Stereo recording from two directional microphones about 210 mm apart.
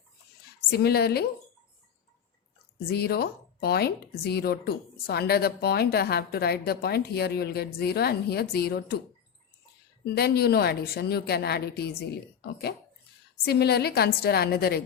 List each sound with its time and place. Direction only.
0.7 s speech: 50° left (ahead or behind)
2.8 s speech: 50° left (ahead or behind)
10.2 s speech: 50° left (ahead or behind)